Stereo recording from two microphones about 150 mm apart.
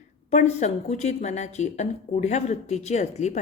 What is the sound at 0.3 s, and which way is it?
A woman's voice, 50° left (ahead or behind).